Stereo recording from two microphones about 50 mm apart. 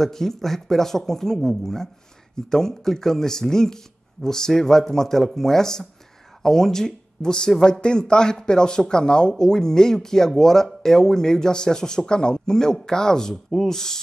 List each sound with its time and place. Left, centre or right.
0.0 s speech: centre